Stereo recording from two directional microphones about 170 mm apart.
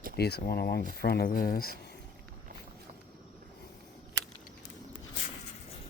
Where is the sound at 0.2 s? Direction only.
70° left (ahead or behind).